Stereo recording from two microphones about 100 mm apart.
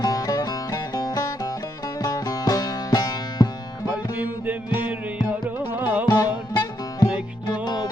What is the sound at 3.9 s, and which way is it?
Music, 20° right (ahead or behind).